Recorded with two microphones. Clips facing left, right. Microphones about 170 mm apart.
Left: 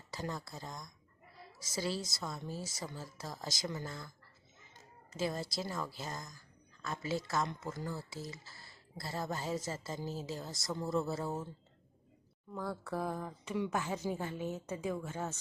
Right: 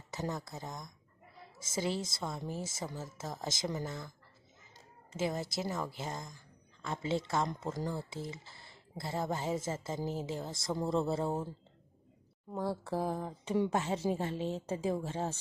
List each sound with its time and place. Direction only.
0.1 s speech: 20° right (ahead or behind)
5.1 s speech: 20° right (ahead or behind)
12.5 s speech: 30° right (ahead or behind)